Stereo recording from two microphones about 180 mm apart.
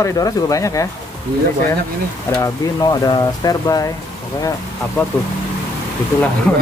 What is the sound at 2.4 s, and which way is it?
Speech, 25° left (ahead or behind).